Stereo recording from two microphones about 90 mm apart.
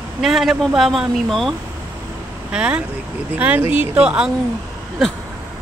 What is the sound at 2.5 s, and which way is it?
Speech, 10° right (ahead or behind).